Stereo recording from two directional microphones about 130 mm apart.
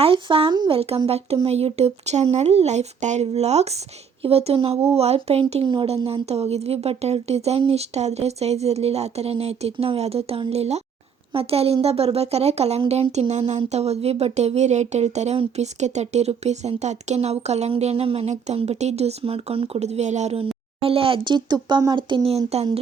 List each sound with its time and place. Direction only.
0.0 s speech: 45° right (ahead or behind)
0.7 s speech: 50° right (ahead or behind)